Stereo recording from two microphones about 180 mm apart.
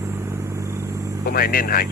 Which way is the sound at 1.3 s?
55° left (ahead or behind).